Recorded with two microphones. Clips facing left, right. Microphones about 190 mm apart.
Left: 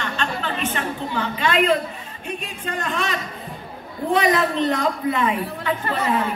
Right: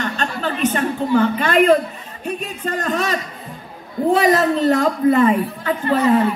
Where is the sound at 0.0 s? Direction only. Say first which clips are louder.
Right 4 dB; 40° right (ahead or behind).